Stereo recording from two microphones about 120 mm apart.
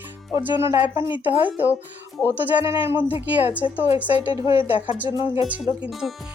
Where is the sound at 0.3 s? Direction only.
40° left (ahead or behind).